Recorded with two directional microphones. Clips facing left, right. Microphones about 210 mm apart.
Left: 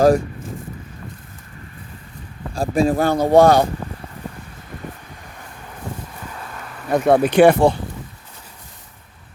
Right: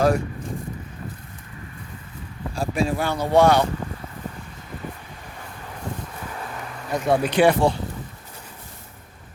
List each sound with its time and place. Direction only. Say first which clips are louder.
2.6 s speech: left 6 dB; 45° left (ahead or behind)
6.9 s speech: left 6 dB; 55° left (ahead or behind)